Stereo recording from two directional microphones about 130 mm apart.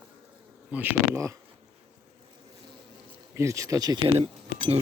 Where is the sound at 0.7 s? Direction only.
10° right (ahead or behind).